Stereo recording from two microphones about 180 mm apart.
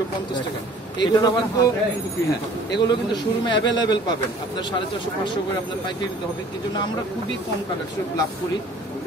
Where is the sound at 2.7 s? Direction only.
25° left (ahead or behind).